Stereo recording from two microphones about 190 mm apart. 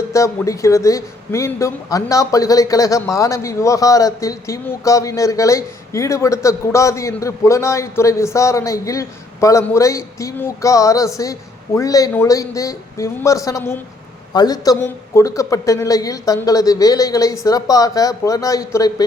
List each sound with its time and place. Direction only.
0.1 s speech: 15° left (ahead or behind)